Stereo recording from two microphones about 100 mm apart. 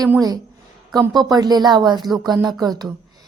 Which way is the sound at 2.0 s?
Centre (ahead or behind).